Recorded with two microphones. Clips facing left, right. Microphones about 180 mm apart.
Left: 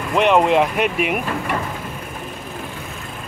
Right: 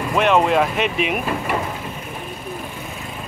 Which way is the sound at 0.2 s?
15° left (ahead or behind).